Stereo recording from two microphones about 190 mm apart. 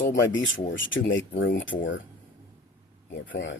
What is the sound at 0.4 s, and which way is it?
Speech, 80° left.